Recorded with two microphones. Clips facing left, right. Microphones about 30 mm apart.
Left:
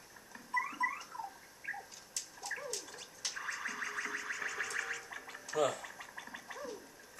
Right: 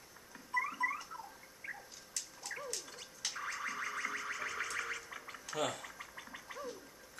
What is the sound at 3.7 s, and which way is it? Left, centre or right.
Music, centre.